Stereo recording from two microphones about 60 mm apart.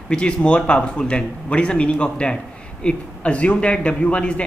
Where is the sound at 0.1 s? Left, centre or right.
Centre.